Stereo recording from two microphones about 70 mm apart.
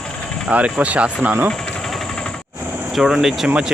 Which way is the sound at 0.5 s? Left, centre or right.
Centre.